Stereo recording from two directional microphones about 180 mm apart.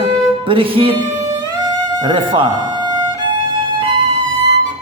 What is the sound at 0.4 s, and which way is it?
Speech, 30° right (ahead or behind).